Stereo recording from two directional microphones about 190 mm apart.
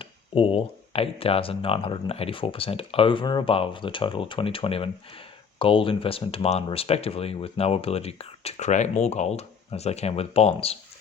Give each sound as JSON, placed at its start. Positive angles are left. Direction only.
{"t": 0.0, "sound": "speech", "side_deg": 30}